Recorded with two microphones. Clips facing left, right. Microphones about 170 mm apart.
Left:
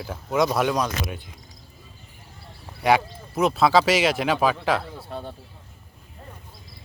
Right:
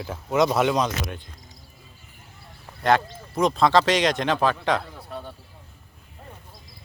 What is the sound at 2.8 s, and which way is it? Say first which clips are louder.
Speech: left 1 dB; 10° left (ahead or behind).